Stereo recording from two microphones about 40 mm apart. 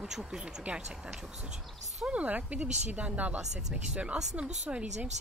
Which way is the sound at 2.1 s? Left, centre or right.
Right.